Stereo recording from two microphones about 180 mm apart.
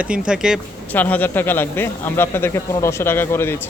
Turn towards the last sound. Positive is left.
turn(degrees=15)  # may be behind; listen again after turning